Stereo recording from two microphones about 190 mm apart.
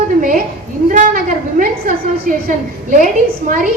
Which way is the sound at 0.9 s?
45° right (ahead or behind).